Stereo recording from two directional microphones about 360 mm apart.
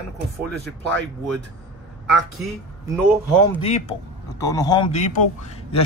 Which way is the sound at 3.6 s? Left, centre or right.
Centre.